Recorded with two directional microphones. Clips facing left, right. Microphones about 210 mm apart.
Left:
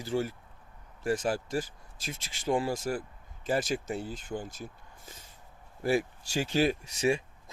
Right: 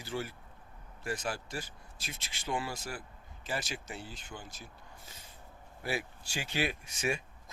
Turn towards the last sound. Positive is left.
turn(degrees=35)  # may be behind; listen again after turning